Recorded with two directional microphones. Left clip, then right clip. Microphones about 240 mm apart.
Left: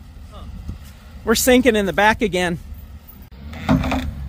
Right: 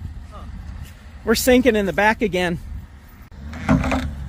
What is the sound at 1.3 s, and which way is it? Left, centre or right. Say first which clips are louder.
Speech: left 1 dB; centre.